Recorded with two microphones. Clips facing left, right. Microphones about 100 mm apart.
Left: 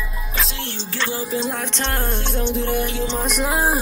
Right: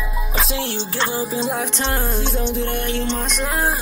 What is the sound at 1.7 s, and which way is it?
Music, 5° right (ahead or behind).